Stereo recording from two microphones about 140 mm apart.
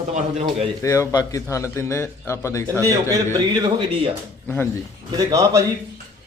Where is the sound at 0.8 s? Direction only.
20° left (ahead or behind).